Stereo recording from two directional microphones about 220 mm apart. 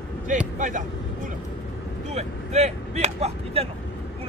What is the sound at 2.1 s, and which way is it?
Speech, 30° right (ahead or behind).